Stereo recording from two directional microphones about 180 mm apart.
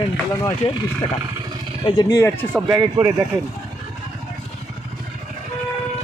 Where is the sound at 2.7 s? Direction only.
15° right (ahead or behind).